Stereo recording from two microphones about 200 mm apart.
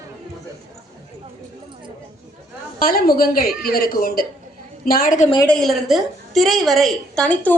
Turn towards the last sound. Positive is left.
turn(degrees=5)  # may be behind; listen again after turning